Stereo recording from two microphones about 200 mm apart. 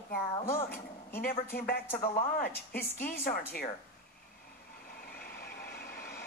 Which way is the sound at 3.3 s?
50° left (ahead or behind).